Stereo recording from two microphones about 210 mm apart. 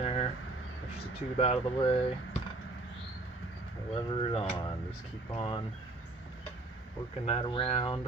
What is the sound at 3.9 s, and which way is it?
Speech, 25° left (ahead or behind).